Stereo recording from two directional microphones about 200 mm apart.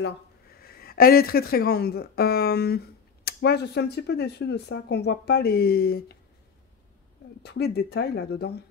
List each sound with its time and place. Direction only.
0.6 s speech: 50° left (ahead or behind)
7.4 s speech: 55° left (ahead or behind)